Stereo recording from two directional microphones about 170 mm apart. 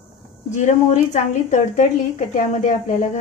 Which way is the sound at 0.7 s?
45° left (ahead or behind).